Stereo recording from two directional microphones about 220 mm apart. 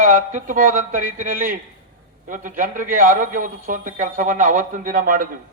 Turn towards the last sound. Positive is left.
turn(degrees=-40)  # may be behind; listen again after turning